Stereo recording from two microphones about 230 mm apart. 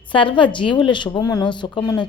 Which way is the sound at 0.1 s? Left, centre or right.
Left.